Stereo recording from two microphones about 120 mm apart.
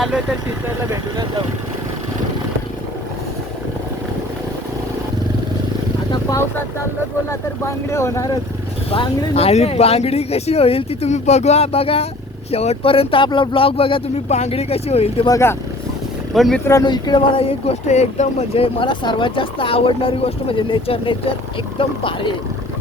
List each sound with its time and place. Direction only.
7.3 s speech: 25° left (ahead or behind)
8.9 s speech: 55° left (ahead or behind)
11.1 s speech: 65° left (ahead or behind)
15.3 s speech: 20° left (ahead or behind)
16.3 s speech: centre (ahead or behind)
16.8 s speech: 40° left (ahead or behind)
17.8 s speech: 75° left (ahead or behind); by 22.4 s 45° left (ahead or behind)